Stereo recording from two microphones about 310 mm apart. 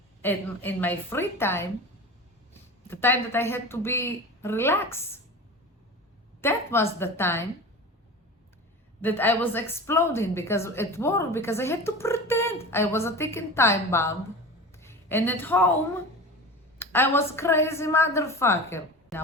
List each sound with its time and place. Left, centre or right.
0.2 s a woman's voice: centre
6.4 s a woman's voice: centre
9.0 s a woman's voice: centre
16.7 s a woman's voice: centre